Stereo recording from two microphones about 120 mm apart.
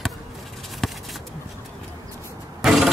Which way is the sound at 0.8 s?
Centre (ahead or behind).